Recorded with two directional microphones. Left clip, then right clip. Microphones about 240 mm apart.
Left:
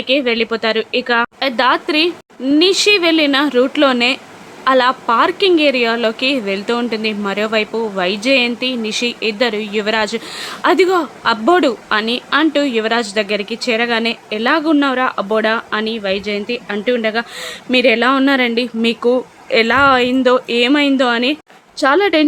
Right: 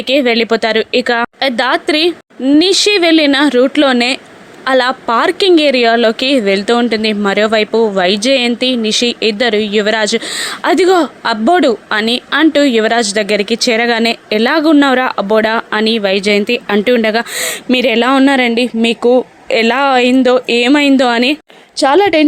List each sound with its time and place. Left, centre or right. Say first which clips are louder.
0.1 s a woman's voice: right 5 dB; right